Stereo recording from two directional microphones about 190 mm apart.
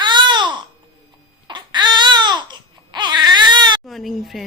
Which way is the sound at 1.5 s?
25° right (ahead or behind).